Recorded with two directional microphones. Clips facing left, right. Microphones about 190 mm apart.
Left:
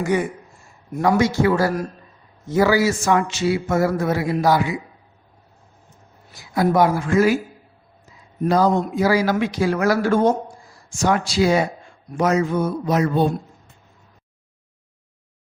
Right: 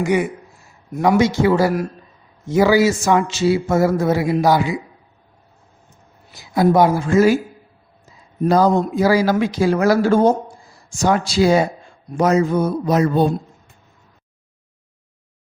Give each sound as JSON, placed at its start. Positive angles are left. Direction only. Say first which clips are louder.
{"t": 0.0, "sound": "a man's voice", "louder": "right 3 dB", "side_deg": -15}
{"t": 6.5, "sound": "a man's voice", "louder": "right 3 dB", "side_deg": -25}
{"t": 8.4, "sound": "a man's voice", "louder": "right 3 dB", "side_deg": -40}